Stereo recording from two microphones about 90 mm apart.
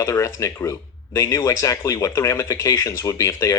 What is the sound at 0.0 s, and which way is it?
Speech, 40° left (ahead or behind).